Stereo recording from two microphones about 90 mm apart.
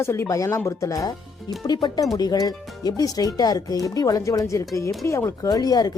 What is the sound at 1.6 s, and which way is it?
Speech, 55° left (ahead or behind).